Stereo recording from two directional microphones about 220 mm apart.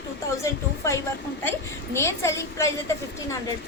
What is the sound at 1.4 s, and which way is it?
Speech, 10° left (ahead or behind).